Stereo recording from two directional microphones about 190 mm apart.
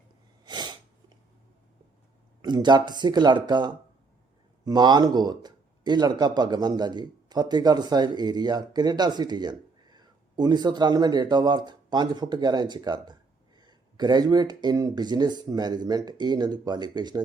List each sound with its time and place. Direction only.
0.4 s sneeze: 20° right (ahead or behind)
2.4 s speech: 20° right (ahead or behind)